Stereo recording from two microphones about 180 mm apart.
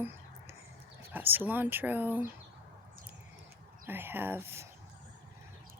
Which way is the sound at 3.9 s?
10° right (ahead or behind).